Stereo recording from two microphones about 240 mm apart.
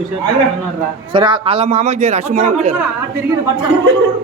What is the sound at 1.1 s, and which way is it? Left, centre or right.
A man's voice, centre.